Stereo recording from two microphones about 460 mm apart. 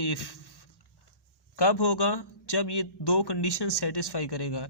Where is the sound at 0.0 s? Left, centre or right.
Left.